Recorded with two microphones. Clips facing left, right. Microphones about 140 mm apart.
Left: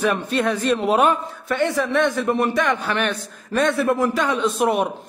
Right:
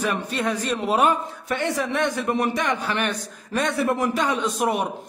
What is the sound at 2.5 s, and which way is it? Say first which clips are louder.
A man's voice: left 3 dB; 55° left (ahead or behind).